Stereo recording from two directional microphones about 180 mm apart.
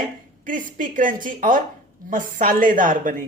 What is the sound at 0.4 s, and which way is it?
A woman's voice, 50° right (ahead or behind).